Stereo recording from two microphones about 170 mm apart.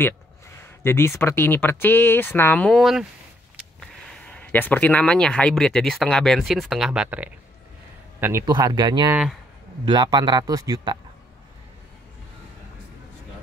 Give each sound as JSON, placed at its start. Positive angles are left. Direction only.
{"t": 0.8, "sound": "speech", "side_deg": 15}
{"t": 4.3, "sound": "a man's voice", "side_deg": 10}
{"t": 9.1, "sound": "speech", "side_deg": -5}
{"t": 9.8, "sound": "speech", "side_deg": -25}